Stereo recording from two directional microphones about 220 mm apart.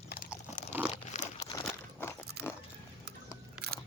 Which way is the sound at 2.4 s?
45° right (ahead or behind).